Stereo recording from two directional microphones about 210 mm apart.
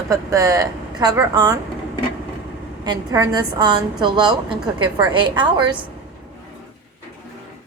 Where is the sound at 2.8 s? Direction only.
15° right (ahead or behind).